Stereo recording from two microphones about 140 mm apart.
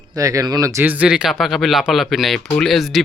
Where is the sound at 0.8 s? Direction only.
10° right (ahead or behind).